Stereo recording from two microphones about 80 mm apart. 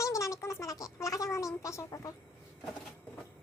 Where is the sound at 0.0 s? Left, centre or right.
Left.